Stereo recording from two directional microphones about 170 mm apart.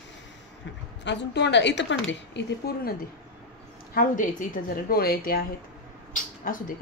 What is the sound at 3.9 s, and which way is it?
A woman's voice, 55° left (ahead or behind).